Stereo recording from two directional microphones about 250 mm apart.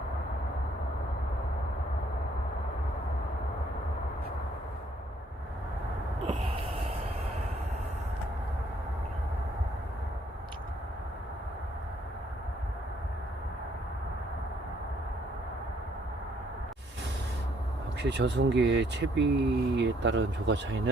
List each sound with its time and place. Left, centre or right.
6.2 s snort: right
18.0 s speech: right